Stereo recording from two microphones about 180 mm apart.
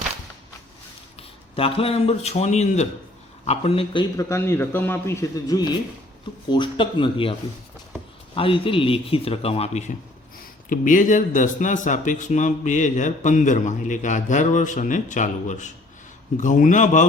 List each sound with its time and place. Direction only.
1.5 s a man's voice: 30° left (ahead or behind)
4.2 s a man's voice: 15° left (ahead or behind)
8.4 s a man's voice: 30° left (ahead or behind)
10.7 s speech: 45° left (ahead or behind)